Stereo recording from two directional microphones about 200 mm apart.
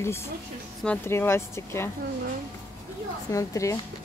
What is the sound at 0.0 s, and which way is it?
Speech, 15° left (ahead or behind).